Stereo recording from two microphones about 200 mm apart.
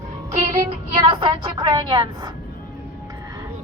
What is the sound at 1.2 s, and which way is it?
A woman's voice, 25° right (ahead or behind).